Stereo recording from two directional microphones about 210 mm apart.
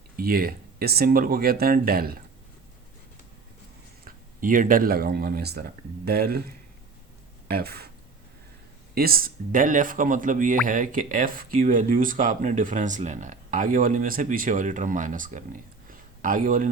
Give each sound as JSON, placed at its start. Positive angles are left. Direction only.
{"t": 0.2, "sound": "speech", "side_deg": -45}
{"t": 4.0, "sound": "speech", "side_deg": -40}
{"t": 7.5, "sound": "speech", "side_deg": -50}
{"t": 9.0, "sound": "speech", "side_deg": -45}
{"t": 15.9, "sound": "a sound", "side_deg": -40}